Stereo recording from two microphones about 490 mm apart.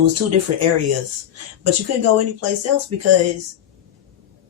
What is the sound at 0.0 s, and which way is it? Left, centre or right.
Speech, right.